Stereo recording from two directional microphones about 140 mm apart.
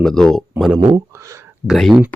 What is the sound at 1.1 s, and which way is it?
Speech, 20° right (ahead or behind).